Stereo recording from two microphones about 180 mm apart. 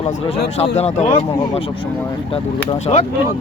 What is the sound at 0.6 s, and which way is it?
Speech, 35° left (ahead or behind).